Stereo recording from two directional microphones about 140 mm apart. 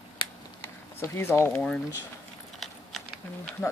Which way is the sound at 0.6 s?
15° left (ahead or behind).